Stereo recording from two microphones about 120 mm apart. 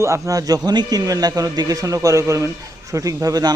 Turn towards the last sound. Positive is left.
turn(degrees=-30)  # may be behind; listen again after turning